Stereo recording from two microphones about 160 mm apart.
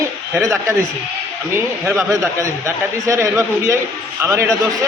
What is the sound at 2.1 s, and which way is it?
A man's voice, 20° right (ahead or behind).